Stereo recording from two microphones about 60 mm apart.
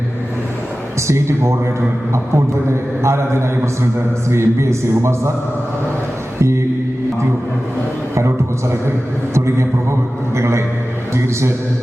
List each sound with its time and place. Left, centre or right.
1.0 s a man's voice: right
6.4 s a sound: right
10.3 s a man's voice: right